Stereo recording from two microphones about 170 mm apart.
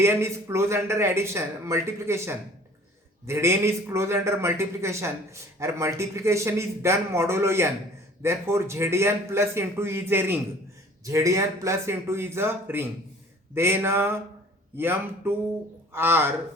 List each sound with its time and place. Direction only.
0.0 s a man's voice: 15° right (ahead or behind)